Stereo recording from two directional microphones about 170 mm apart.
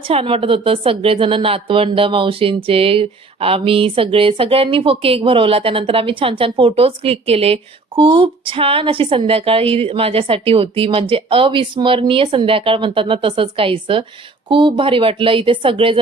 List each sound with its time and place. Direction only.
0.1 s speech: 35° right (ahead or behind)